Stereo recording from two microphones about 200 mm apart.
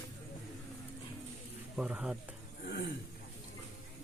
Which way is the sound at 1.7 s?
5° right (ahead or behind).